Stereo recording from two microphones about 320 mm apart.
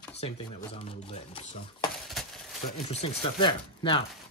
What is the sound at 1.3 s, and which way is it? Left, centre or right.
Speech, centre.